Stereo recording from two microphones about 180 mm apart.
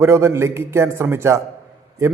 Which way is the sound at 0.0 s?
15° right (ahead or behind).